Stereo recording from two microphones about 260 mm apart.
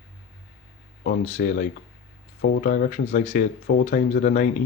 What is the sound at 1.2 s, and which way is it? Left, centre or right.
Speech, left.